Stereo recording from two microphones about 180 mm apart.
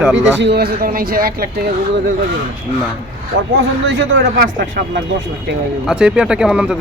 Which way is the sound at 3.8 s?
80° right.